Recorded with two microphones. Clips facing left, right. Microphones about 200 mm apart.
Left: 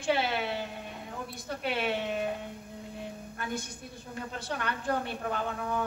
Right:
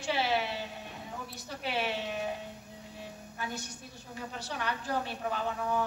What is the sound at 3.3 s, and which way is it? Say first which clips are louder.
A woman's voice: left 2 dB; 55° left (ahead or behind).